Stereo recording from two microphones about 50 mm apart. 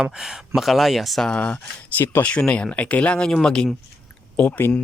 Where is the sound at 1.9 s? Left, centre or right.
Left.